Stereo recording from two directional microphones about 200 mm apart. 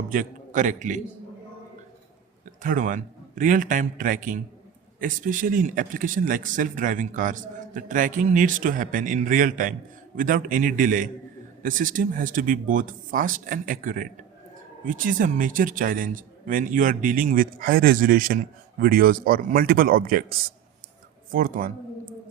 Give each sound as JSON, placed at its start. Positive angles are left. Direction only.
{"t": 0.1, "sound": "a man's voice", "side_deg": -40}
{"t": 2.6, "sound": "a man's voice", "side_deg": -40}